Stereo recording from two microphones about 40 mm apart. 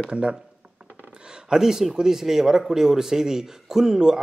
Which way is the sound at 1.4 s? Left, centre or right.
Centre.